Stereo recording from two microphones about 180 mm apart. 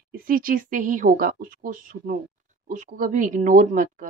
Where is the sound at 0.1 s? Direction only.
50° right (ahead or behind).